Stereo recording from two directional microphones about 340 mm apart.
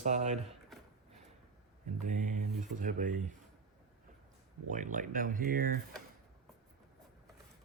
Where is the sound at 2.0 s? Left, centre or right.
Right.